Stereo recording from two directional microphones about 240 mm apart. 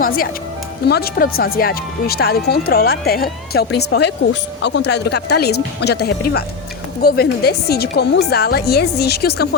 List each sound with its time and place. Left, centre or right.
0.9 s speech: left